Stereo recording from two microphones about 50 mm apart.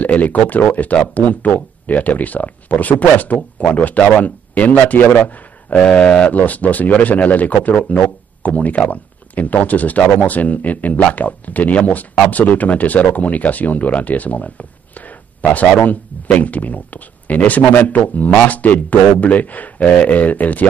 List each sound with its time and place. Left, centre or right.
0.0 s a man's voice: left
5.8 s speech: centre
6.3 s speech: left